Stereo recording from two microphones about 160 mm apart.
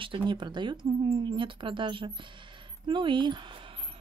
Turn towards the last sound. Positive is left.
turn(degrees=-30)  # may be behind; listen again after turning